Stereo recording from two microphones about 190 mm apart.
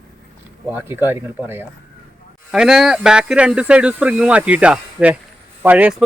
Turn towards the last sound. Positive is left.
turn(degrees=-10)  # may be behind; listen again after turning